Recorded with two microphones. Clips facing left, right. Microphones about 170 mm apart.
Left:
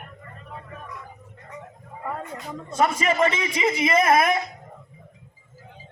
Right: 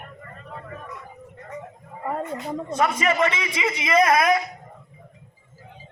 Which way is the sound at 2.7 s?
30° left (ahead or behind).